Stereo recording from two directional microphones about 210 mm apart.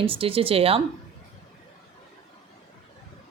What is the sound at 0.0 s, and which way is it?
Speech, 25° right (ahead or behind).